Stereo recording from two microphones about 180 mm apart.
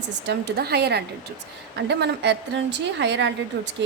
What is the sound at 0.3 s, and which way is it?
A woman's voice, 65° right (ahead or behind).